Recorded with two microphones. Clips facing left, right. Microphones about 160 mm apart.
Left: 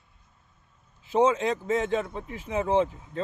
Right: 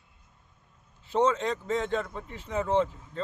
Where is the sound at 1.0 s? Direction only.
10° left (ahead or behind).